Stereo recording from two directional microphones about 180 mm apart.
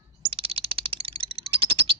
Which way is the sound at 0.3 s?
30° right (ahead or behind).